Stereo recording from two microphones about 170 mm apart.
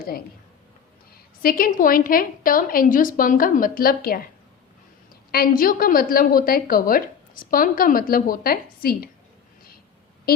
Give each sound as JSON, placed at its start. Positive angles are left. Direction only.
{"t": 1.4, "sound": "a woman's voice", "side_deg": 55}
{"t": 5.3, "sound": "a woman's voice", "side_deg": 60}
{"t": 10.3, "sound": "a woman's voice", "side_deg": 65}